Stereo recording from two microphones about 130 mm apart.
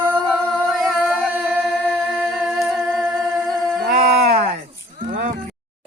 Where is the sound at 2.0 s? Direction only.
10° left (ahead or behind).